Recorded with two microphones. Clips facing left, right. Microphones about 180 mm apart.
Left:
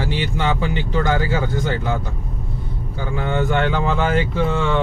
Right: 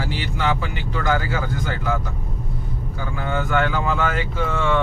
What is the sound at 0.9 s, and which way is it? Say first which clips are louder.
Speech: left 1 dB; 25° left (ahead or behind).